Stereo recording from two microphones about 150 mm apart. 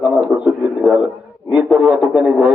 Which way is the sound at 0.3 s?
5° right (ahead or behind).